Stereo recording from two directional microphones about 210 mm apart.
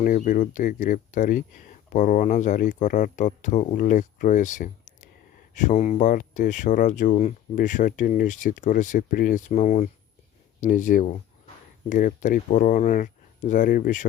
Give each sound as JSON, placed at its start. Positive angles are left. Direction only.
{"t": 0.0, "sound": "speech", "side_deg": 40}